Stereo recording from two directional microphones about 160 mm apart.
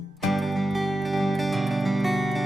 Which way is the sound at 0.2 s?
Centre (ahead or behind).